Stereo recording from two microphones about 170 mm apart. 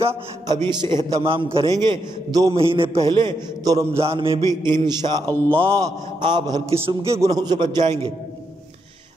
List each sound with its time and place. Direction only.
0.5 s a man's voice: 25° right (ahead or behind)
4.0 s a man's voice: 35° right (ahead or behind)
7.8 s a man's voice: 40° right (ahead or behind)